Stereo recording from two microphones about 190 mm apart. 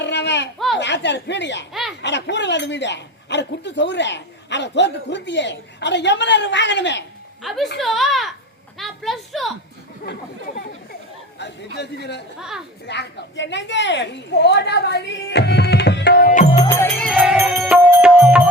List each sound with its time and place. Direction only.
0.0 s a sound: 65° left (ahead or behind)
0.8 s speech: 70° left (ahead or behind)
7.4 s a woman's voice: centre (ahead or behind)
11.3 s a woman's voice: 65° left (ahead or behind)
12.4 s speech: 5° right (ahead or behind)
12.9 s a woman's voice: 65° left (ahead or behind)
16.6 s music: 15° left (ahead or behind)
17.1 s music: 5° right (ahead or behind)